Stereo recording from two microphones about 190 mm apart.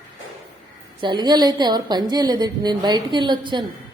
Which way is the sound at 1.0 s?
25° right (ahead or behind).